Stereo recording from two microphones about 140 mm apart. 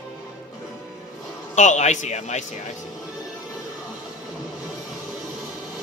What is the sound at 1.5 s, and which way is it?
Speech, 55° left (ahead or behind).